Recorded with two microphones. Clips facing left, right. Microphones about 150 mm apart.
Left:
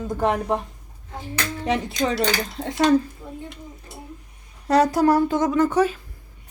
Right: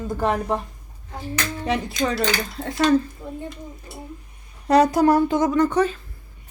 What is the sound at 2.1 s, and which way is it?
Speech, 20° left (ahead or behind).